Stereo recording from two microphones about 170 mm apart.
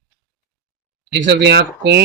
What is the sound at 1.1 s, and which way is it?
Speech, 90° right.